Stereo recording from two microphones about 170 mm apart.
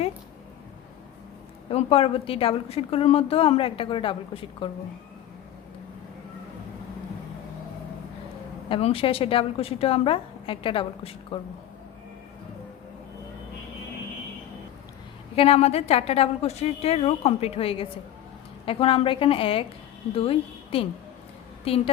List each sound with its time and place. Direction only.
1.7 s a woman's voice: 35° left (ahead or behind)
8.7 s a woman's voice: 35° left (ahead or behind)
15.4 s a woman's voice: 40° left (ahead or behind)